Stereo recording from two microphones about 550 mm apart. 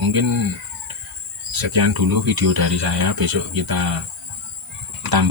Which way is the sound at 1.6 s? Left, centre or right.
Right.